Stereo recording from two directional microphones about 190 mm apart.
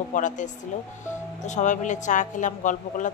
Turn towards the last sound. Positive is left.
turn(degrees=40)  # may be behind; listen again after turning